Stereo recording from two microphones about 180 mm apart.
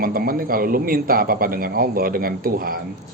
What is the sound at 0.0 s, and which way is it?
Speech, 55° right (ahead or behind).